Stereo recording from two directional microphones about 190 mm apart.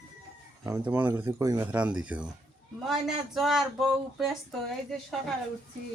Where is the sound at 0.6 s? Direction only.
15° right (ahead or behind).